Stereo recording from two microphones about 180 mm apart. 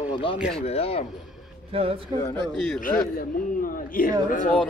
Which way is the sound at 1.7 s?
30° right (ahead or behind).